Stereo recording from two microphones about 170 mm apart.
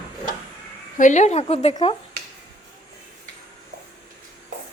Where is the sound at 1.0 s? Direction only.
45° left (ahead or behind).